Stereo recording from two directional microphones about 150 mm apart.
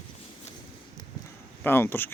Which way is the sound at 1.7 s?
15° left (ahead or behind).